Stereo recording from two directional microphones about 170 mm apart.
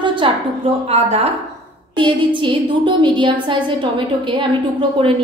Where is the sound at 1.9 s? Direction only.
30° right (ahead or behind).